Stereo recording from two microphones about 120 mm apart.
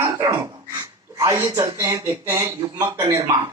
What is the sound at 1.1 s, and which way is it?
A woman's voice, 30° right (ahead or behind).